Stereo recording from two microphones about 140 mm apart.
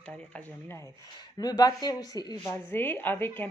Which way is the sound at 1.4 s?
30° left (ahead or behind).